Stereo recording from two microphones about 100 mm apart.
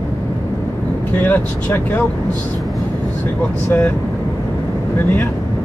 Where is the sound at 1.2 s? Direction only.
20° left (ahead or behind).